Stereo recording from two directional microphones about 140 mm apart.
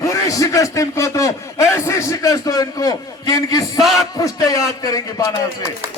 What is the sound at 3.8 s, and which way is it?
Speech, centre (ahead or behind).